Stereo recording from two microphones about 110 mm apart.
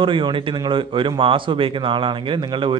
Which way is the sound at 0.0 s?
50° right (ahead or behind).